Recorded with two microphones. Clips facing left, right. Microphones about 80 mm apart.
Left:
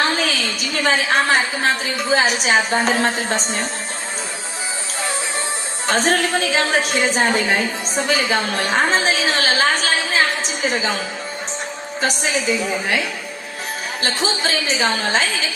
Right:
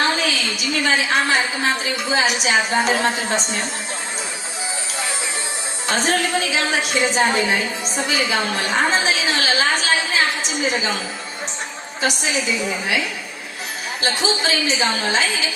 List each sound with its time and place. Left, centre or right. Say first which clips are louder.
0.0 s a sound: left 1 dB; left
1.8 s a woman's voice: left 2 dB; left
5.9 s a woman's voice: left 2 dB; left
12.0 s a woman's voice: left 1 dB; left
14.0 s a woman's voice: right 1 dB; left